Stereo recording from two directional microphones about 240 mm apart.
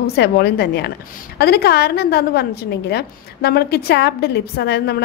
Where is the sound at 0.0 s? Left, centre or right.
Left.